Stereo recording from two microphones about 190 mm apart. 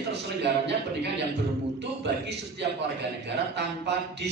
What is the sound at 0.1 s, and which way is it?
Speech, 65° right (ahead or behind).